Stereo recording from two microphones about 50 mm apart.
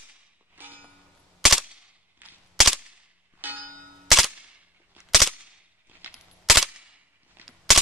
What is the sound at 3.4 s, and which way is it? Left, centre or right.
Clang, right.